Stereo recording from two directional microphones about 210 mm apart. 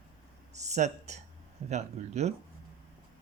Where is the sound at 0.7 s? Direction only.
35° right (ahead or behind).